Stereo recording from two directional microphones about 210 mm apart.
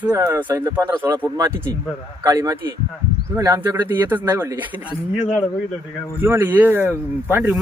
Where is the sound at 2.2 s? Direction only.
15° right (ahead or behind).